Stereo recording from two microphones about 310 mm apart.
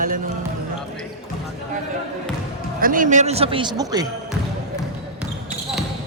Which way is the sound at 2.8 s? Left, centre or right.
Right.